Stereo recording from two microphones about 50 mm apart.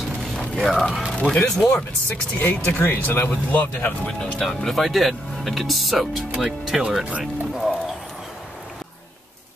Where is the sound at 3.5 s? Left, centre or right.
Left.